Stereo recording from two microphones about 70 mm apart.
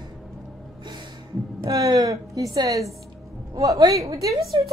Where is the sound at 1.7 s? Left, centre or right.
Right.